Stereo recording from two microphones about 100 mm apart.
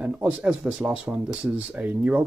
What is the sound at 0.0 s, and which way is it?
Speech, 15° right (ahead or behind).